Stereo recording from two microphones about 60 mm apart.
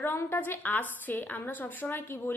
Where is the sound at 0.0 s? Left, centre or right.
Left.